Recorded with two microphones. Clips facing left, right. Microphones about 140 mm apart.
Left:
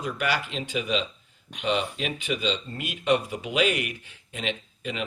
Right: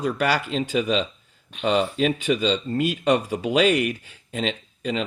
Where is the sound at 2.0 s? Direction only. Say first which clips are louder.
Right 8 dB; 40° right (ahead or behind).